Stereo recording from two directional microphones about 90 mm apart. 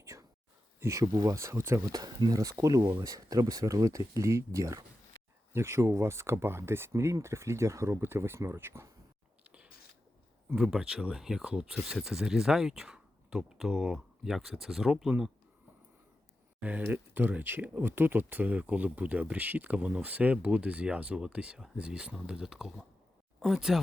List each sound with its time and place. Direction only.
0.0 s whispering: 35° right (ahead or behind)
0.8 s speech: 35° right (ahead or behind)
9.4 s biting: 15° right (ahead or behind)
10.5 s speech: 10° right (ahead or behind)
16.6 s speech: 15° right (ahead or behind)